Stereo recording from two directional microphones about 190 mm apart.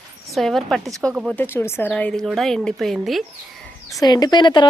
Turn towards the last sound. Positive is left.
turn(degrees=25)  # may be behind; listen again after turning